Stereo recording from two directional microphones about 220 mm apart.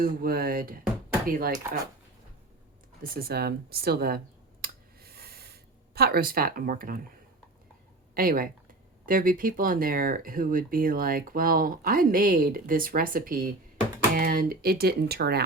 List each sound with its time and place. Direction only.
0.0 s speech: 40° right (ahead or behind)
3.0 s speech: 45° right (ahead or behind)
4.6 s a sound: 45° right (ahead or behind)
8.1 s speech: 40° right (ahead or behind)